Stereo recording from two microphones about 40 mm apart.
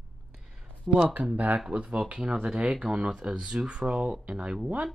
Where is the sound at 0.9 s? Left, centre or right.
Right.